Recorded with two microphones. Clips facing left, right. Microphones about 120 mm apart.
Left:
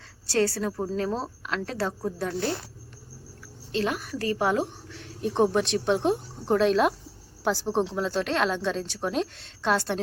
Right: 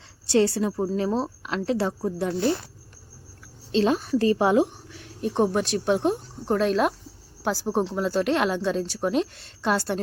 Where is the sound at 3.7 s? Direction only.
25° right (ahead or behind).